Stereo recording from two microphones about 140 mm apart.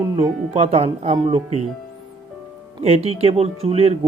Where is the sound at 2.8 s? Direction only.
50° right (ahead or behind).